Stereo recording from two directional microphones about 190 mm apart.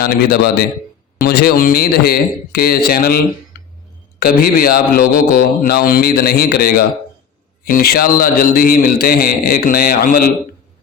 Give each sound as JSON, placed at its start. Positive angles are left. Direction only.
{"t": 0.0, "sound": "a man's voice", "side_deg": 55}
{"t": 4.2, "sound": "a man's voice", "side_deg": 50}